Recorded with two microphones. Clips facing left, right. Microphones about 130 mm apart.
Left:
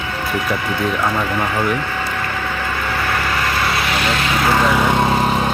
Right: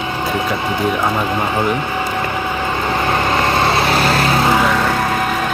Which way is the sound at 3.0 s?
25° right (ahead or behind).